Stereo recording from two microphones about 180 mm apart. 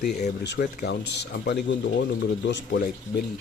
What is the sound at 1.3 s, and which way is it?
Speech, 80° left.